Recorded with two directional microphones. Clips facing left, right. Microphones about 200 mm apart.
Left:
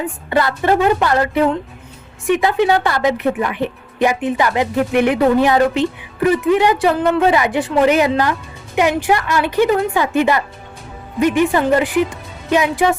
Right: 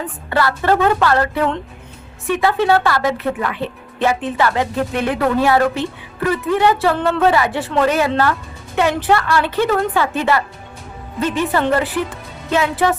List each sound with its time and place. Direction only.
0.0 s a woman's voice: 20° left (ahead or behind)